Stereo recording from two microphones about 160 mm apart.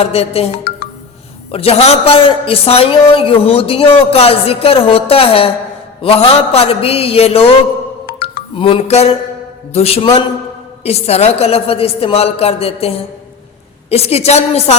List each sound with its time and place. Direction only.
0.0 s a man's voice: 40° left (ahead or behind)
13.9 s a man's voice: 40° left (ahead or behind)